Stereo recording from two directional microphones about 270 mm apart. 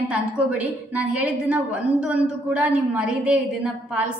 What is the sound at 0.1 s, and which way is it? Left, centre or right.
A woman's voice, centre.